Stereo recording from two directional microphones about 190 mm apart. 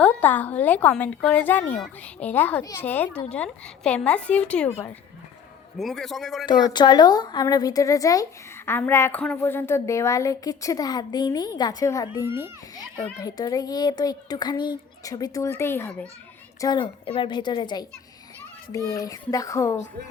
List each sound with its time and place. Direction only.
0.0 s a man's voice: 10° left (ahead or behind)
6.4 s speech: 25° left (ahead or behind)
12.2 s a child's voice: 10° right (ahead or behind)
13.1 s speech: 20° left (ahead or behind)
16.6 s speech: 20° left (ahead or behind)